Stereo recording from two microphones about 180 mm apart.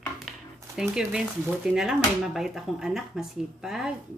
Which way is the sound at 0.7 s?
5° right (ahead or behind).